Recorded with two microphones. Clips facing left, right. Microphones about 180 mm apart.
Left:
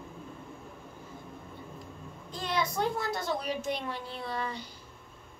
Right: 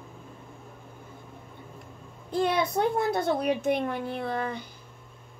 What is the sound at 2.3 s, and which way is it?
A woman's voice, 60° right (ahead or behind).